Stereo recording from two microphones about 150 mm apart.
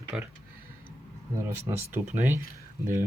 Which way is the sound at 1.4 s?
15° right (ahead or behind).